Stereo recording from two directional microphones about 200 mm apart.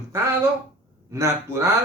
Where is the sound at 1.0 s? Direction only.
15° right (ahead or behind).